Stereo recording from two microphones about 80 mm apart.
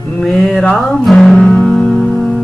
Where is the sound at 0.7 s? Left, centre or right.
Centre.